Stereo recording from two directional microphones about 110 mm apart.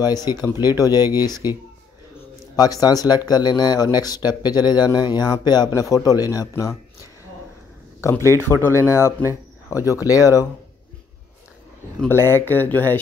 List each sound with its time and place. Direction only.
0.0 s speech: 35° left (ahead or behind)
2.5 s speech: 35° left (ahead or behind)
5.7 s speech: 30° left (ahead or behind)
8.0 s speech: 25° left (ahead or behind)
12.1 s speech: 20° left (ahead or behind)